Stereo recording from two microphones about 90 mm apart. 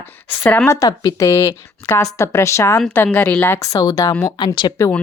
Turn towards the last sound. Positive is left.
turn(degrees=30)  # may be behind; listen again after turning